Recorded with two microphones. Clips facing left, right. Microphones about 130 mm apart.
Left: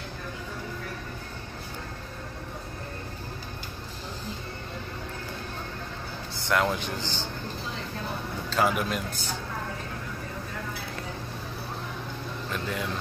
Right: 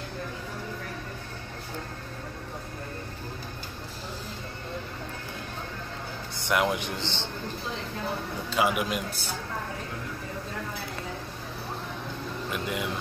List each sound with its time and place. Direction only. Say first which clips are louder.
6.4 s a man's voice: even; 15° right (ahead or behind)
8.5 s a man's voice: left 1 dB; 10° right (ahead or behind)
12.4 s speech: even; 10° right (ahead or behind)